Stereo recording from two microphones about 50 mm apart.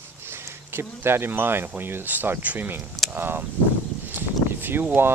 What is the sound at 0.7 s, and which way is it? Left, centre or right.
Speech, right.